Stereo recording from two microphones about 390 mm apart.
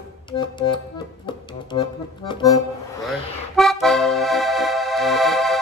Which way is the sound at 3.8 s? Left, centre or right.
Centre.